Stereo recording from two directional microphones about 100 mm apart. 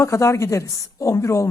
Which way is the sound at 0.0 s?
30° left (ahead or behind).